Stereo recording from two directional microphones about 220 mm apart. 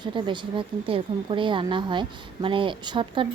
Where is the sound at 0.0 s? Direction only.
20° right (ahead or behind).